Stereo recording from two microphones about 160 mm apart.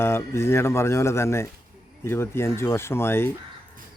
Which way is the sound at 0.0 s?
15° left (ahead or behind).